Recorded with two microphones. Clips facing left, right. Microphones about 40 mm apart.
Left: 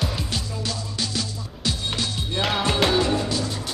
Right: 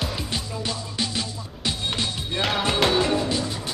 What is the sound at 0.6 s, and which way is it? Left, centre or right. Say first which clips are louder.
Music: right 1 dB; right.